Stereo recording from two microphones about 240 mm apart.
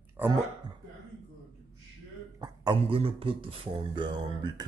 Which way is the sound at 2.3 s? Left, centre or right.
Centre.